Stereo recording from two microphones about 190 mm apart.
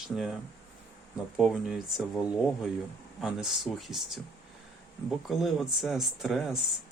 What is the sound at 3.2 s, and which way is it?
Speech, centre (ahead or behind).